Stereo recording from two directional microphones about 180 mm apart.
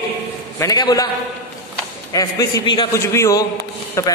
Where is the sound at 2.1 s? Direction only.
20° left (ahead or behind).